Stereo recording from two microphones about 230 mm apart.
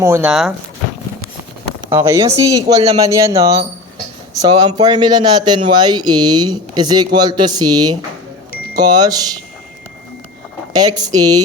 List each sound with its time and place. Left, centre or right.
0.0 s speech: centre
1.9 s speech: centre
10.8 s speech: centre